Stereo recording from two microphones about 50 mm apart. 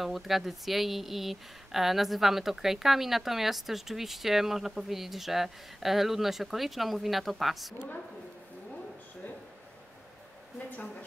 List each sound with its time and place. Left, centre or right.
0.0 s speech: centre